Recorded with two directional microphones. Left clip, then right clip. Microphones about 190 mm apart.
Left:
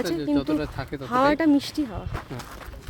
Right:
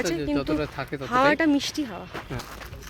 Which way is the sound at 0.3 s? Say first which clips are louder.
Left 1 dB; 15° right (ahead or behind).